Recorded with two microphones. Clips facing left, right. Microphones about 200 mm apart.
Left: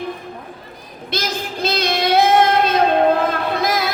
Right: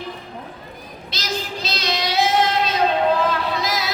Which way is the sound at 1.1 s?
55° left (ahead or behind).